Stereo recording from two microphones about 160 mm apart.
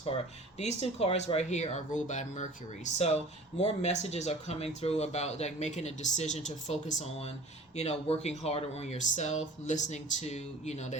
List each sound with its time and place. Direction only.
0.1 s speech: 35° left (ahead or behind)